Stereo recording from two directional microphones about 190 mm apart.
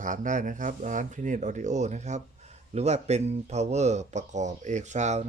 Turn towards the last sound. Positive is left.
turn(degrees=-40)  # may be behind; listen again after turning